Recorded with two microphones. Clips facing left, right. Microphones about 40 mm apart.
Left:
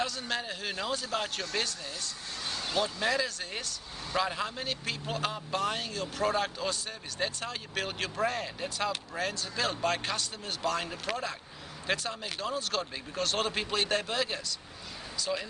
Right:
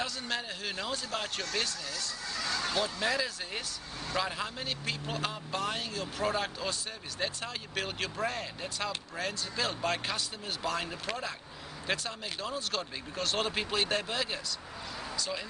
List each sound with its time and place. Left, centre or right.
0.0 s speech: centre
2.3 s speech: right
2.8 s speech: centre